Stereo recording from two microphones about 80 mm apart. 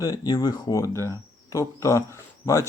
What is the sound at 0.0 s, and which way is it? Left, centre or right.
Speech, left.